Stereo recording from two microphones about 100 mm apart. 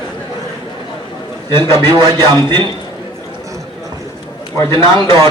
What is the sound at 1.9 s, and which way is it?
Speech, 50° right (ahead or behind).